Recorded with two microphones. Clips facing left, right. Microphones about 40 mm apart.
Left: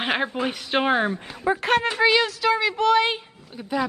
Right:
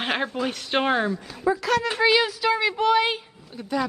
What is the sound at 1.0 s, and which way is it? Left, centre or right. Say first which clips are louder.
Speech: even; left.